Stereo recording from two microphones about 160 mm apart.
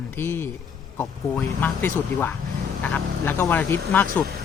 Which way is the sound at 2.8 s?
10° left (ahead or behind).